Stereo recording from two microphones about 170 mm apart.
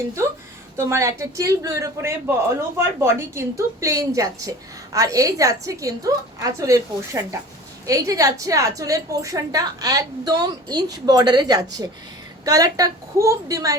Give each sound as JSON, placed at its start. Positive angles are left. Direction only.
{"t": 0.8, "sound": "a man's voice", "side_deg": -15}